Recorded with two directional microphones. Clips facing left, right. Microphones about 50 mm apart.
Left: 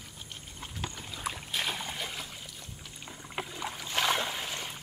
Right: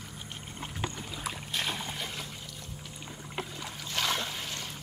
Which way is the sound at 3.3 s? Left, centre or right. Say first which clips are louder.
Left 2 dB; centre.